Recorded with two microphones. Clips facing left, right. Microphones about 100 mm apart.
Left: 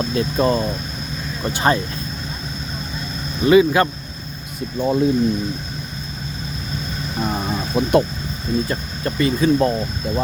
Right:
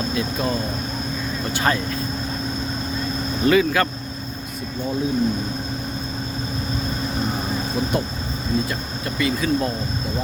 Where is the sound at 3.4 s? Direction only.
20° left (ahead or behind).